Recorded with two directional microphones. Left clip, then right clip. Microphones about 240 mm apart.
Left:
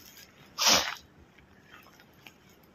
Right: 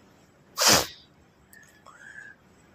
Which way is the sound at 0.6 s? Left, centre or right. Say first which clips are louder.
Right 3 dB; right.